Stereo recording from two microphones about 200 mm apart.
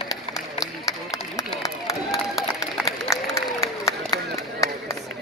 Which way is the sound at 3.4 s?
15° left (ahead or behind).